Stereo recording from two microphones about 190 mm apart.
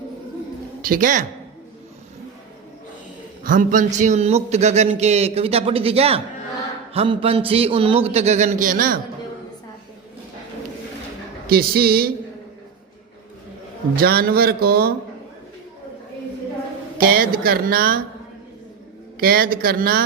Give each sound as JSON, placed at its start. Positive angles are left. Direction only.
{"t": 0.8, "sound": "a woman's voice", "side_deg": -45}
{"t": 3.4, "sound": "a man's voice", "side_deg": -45}
{"t": 11.4, "sound": "speech", "side_deg": -55}
{"t": 13.9, "sound": "speech", "side_deg": -55}
{"t": 17.0, "sound": "speech", "side_deg": -50}
{"t": 19.2, "sound": "speech", "side_deg": -50}